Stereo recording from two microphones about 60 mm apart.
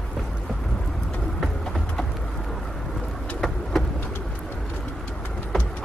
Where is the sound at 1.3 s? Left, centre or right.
Centre.